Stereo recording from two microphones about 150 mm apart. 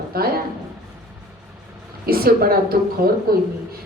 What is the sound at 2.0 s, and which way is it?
A woman's voice, 90° right.